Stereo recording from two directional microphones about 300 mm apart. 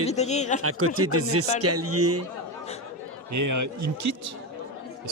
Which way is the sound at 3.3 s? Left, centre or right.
Right.